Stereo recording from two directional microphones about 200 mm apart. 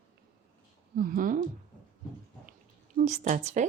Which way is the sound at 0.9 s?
45° right (ahead or behind).